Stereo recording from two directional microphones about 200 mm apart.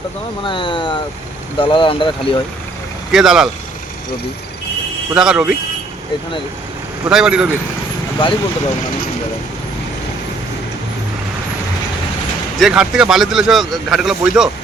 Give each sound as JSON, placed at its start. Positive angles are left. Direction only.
{"t": 0.4, "sound": "speech", "side_deg": 25}
{"t": 3.1, "sound": "speech", "side_deg": 0}
{"t": 5.1, "sound": "speech", "side_deg": -5}
{"t": 7.1, "sound": "speech", "side_deg": -5}
{"t": 8.2, "sound": "speech", "side_deg": 25}
{"t": 12.5, "sound": "speech", "side_deg": 0}